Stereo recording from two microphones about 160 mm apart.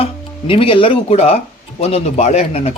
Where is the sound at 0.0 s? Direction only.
35° left (ahead or behind).